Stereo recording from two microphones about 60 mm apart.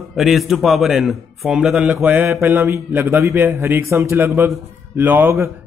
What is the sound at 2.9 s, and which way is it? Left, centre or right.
Speech, right.